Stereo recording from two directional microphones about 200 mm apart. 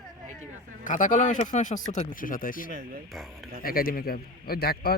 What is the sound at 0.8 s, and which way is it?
A man's voice, 40° left (ahead or behind).